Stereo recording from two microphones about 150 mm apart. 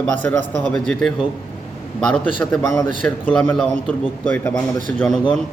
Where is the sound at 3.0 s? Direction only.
5° left (ahead or behind).